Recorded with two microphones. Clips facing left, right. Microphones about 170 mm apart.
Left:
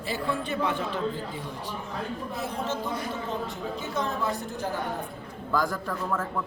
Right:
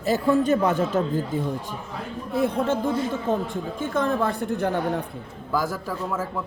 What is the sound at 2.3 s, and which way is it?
A woman's voice, 55° right (ahead or behind).